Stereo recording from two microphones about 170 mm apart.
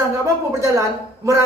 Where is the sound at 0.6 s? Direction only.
20° right (ahead or behind).